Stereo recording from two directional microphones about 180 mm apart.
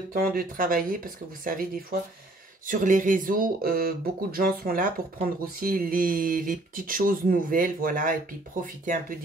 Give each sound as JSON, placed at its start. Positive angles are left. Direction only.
{"t": 0.1, "sound": "speech", "side_deg": -55}